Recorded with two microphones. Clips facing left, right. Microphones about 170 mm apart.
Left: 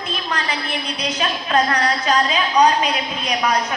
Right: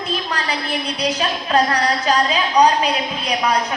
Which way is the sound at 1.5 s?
35° right (ahead or behind).